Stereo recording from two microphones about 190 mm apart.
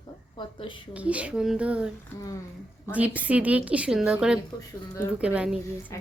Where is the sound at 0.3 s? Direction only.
25° left (ahead or behind).